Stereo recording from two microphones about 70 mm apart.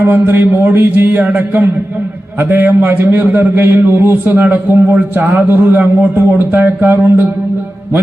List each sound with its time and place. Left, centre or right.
0.0 s a man's voice: right